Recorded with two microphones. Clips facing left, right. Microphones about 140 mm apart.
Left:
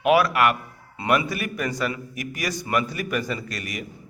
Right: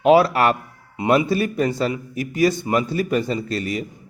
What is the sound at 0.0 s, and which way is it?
A man's voice, 30° right (ahead or behind).